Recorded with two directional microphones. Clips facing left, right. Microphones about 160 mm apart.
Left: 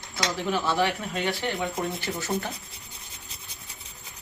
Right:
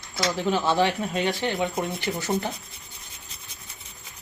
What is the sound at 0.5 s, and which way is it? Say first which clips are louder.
Speech: right 2 dB; 25° right (ahead or behind).